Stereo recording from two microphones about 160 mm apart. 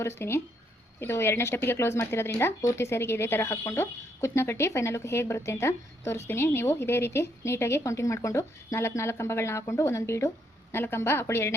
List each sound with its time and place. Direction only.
0.2 s speech: 15° left (ahead or behind)